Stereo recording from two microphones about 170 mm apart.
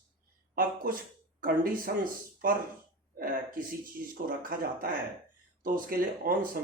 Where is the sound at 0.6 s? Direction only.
55° right (ahead or behind).